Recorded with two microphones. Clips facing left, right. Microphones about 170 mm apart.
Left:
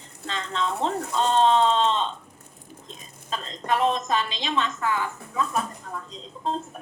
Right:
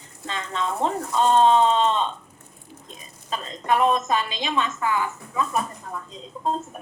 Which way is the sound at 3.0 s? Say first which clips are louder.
Right 2 dB; 5° right (ahead or behind).